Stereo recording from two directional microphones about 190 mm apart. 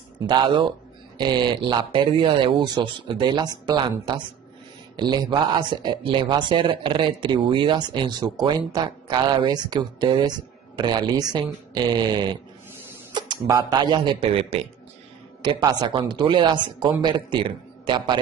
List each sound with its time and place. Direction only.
0.3 s speech: 25° right (ahead or behind)